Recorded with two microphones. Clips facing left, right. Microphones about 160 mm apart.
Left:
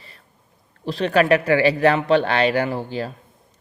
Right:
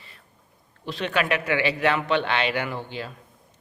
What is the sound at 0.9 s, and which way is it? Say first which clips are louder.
Speech: left 8 dB; 35° left (ahead or behind).